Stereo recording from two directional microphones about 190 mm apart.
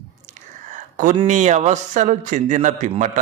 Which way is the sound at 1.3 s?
40° right (ahead or behind).